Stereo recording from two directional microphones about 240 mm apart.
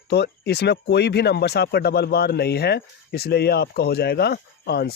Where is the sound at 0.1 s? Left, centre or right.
Left.